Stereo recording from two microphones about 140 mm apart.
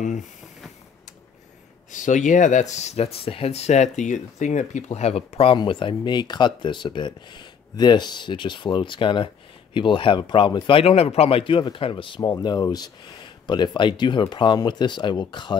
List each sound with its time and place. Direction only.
1.9 s speech: 65° left (ahead or behind); by 15.5 s 35° left (ahead or behind)